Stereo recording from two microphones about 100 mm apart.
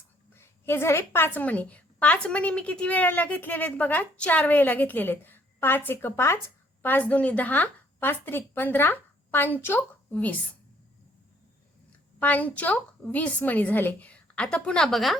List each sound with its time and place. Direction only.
0.3 s a woman's voice: 25° left (ahead or behind)
11.9 s a woman's voice: 15° left (ahead or behind)